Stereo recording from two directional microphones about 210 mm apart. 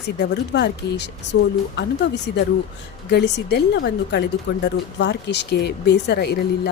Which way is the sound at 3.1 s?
55° left (ahead or behind).